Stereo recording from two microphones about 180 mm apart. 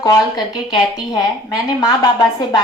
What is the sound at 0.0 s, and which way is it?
Speech, 20° left (ahead or behind).